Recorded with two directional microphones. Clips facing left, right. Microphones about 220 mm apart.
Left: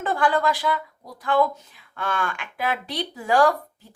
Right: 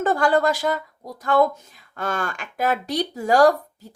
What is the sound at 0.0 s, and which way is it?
Speech, 40° right (ahead or behind).